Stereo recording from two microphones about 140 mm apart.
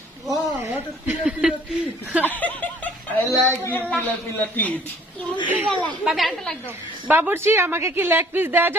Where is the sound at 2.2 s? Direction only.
10° left (ahead or behind).